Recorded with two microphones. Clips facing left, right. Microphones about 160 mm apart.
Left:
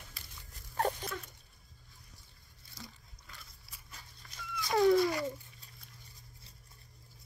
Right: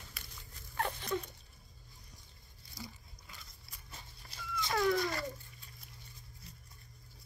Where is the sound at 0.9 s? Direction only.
40° left (ahead or behind).